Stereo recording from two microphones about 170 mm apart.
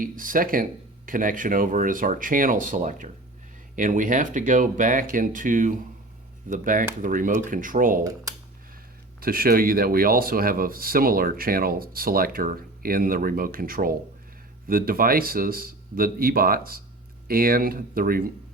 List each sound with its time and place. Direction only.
0.0 s speech: 55° right (ahead or behind)
9.2 s speech: 60° right (ahead or behind)